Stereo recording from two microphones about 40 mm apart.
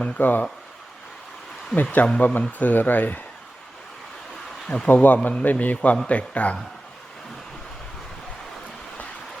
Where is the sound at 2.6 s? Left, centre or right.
Left.